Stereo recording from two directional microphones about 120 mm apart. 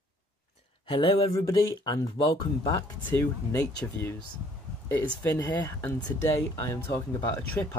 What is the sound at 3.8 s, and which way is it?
Speech, 20° left (ahead or behind).